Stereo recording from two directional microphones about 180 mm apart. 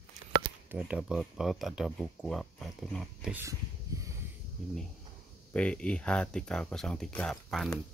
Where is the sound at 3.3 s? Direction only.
15° right (ahead or behind).